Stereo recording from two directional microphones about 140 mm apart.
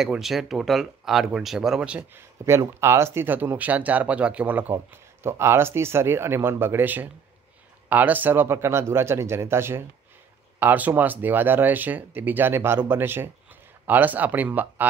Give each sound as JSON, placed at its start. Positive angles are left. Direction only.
{"t": 0.0, "sound": "speech", "side_deg": -5}